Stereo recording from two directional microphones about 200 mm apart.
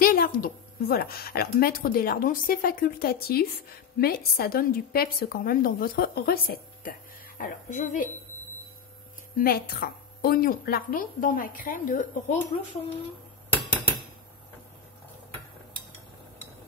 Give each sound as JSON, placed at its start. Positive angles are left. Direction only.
{"t": 0.0, "sound": "a woman's voice", "side_deg": 45}
{"t": 9.4, "sound": "a woman's voice", "side_deg": 45}
{"t": 13.5, "sound": "a sound", "side_deg": 10}